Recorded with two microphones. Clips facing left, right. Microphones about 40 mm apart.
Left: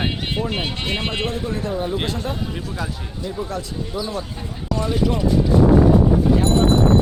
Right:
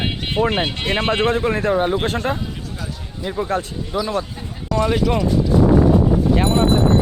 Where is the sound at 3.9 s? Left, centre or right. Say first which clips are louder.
Right 7 dB; right.